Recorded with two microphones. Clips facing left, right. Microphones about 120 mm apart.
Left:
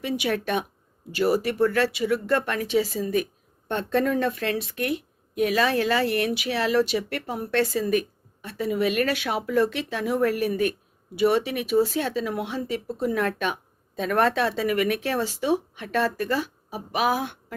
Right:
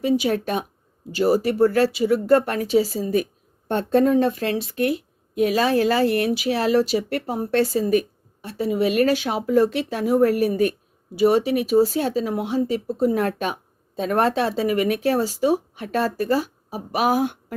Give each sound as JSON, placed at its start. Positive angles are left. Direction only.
{"t": 0.0, "sound": "speech", "side_deg": -35}